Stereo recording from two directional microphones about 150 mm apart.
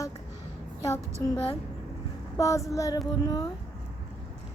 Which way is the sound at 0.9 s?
25° left (ahead or behind).